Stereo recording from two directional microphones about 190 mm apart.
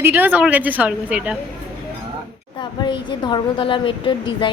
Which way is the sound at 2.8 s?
25° left (ahead or behind).